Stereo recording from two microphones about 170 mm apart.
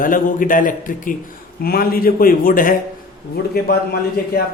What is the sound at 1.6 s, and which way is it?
A man's voice, 60° left (ahead or behind).